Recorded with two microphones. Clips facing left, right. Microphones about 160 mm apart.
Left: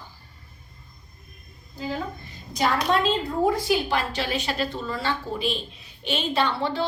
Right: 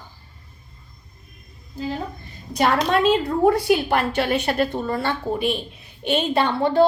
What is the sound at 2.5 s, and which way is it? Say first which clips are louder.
A woman's voice: right 4 dB; 60° right (ahead or behind).